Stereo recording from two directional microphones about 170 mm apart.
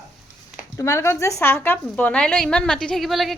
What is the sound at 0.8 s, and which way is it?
A woman's voice, 15° left (ahead or behind).